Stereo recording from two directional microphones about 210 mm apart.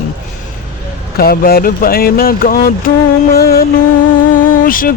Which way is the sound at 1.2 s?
45° left (ahead or behind).